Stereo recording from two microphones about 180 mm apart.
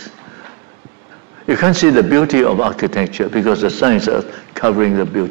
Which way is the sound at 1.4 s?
15° right (ahead or behind).